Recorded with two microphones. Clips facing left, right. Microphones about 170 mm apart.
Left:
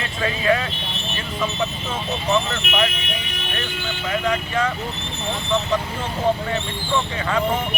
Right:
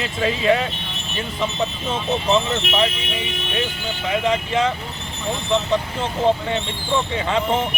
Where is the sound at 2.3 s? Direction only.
30° right (ahead or behind).